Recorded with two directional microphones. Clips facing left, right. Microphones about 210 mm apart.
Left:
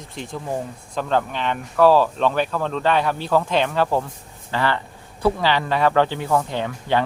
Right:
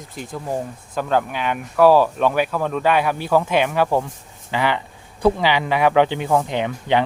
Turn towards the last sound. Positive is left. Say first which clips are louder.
# right 2 dB
turn(degrees=-20)  # may be behind; listen again after turning